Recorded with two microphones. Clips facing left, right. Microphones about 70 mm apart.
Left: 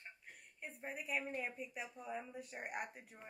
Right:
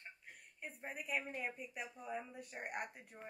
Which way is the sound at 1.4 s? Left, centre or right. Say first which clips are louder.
Even; centre.